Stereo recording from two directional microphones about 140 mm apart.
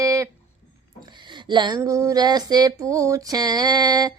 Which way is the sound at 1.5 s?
30° right (ahead or behind).